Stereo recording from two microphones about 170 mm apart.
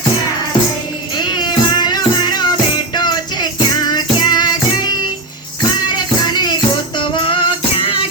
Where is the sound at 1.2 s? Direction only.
25° left (ahead or behind).